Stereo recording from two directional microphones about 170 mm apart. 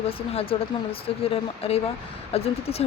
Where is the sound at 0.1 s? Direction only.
35° left (ahead or behind).